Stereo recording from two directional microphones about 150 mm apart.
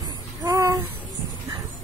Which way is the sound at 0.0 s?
25° right (ahead or behind).